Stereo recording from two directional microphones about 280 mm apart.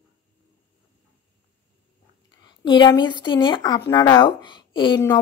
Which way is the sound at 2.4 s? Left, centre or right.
Centre.